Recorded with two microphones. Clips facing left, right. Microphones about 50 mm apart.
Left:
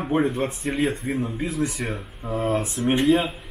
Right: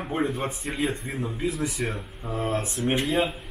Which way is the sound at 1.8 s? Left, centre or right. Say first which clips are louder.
Even; centre.